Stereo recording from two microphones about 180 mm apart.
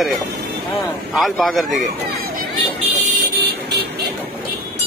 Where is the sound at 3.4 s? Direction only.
60° right (ahead or behind).